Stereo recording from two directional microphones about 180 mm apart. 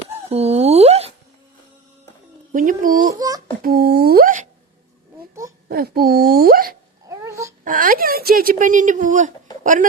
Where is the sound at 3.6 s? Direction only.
60° right (ahead or behind).